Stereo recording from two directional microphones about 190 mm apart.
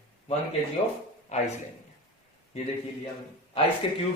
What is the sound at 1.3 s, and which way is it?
Speech, 35° left (ahead or behind).